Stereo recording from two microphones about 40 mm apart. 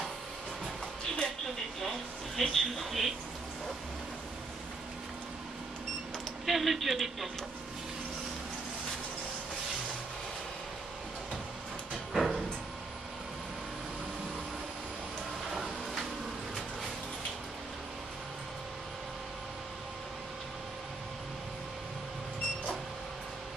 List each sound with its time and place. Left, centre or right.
1.8 s a sound: centre
6.4 s a man's voice: centre
12.1 s music: centre